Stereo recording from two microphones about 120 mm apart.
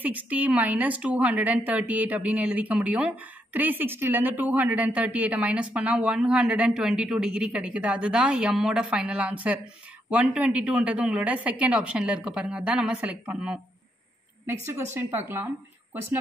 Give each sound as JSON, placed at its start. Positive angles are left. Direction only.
{"t": 0.0, "sound": "a woman's voice", "side_deg": -15}
{"t": 15.0, "sound": "speech", "side_deg": -20}